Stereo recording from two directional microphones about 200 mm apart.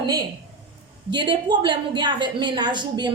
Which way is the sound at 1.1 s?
25° right (ahead or behind).